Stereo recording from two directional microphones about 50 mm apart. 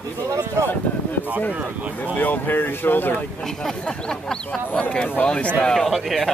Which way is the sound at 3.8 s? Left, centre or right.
Centre.